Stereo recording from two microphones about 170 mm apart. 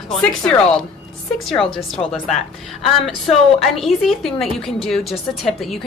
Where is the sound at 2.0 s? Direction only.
20° left (ahead or behind).